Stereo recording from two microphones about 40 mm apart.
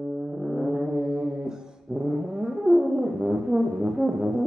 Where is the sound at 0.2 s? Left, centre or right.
Centre.